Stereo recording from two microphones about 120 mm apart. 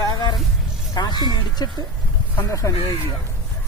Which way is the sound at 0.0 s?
35° left (ahead or behind).